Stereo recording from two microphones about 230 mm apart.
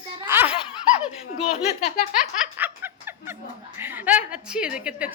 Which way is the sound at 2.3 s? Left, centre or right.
Centre.